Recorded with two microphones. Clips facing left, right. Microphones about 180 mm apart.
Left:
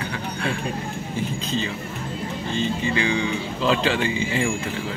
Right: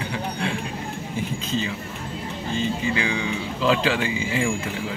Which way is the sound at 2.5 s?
5° right (ahead or behind).